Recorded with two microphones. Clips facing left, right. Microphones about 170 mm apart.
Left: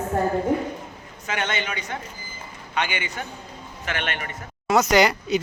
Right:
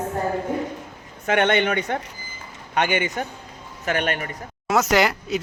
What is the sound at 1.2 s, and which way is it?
A man's voice, 60° right (ahead or behind).